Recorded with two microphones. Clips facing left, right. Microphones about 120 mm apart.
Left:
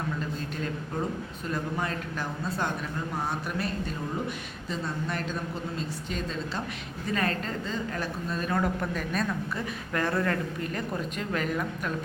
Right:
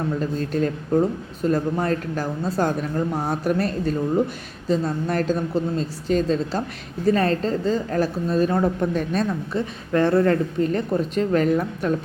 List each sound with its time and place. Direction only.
0.2 s speech: 45° right (ahead or behind)